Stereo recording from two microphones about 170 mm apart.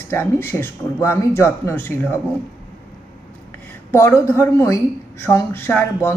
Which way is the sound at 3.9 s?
15° left (ahead or behind).